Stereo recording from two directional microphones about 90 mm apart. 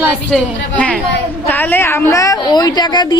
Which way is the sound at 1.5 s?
20° left (ahead or behind).